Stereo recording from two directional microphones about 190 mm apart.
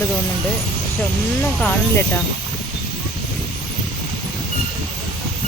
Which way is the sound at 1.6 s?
10° left (ahead or behind).